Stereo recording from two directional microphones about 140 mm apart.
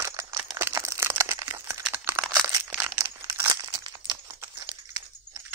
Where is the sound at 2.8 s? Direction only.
20° right (ahead or behind).